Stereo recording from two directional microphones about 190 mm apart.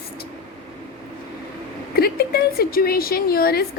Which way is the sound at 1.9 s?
55° left (ahead or behind).